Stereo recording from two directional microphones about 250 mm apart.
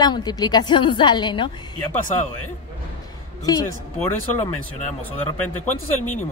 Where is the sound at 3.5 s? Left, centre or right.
Centre.